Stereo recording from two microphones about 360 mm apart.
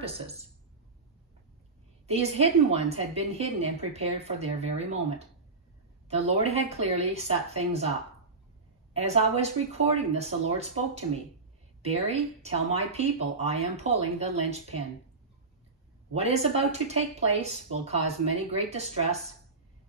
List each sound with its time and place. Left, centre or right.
2.0 s speech: centre
6.0 s speech: centre
8.9 s speech: centre
16.1 s speech: centre